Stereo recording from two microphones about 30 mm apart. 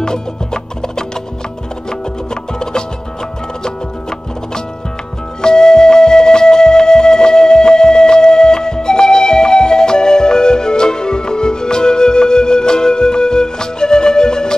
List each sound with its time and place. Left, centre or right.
0.0 s music: left
5.4 s music: left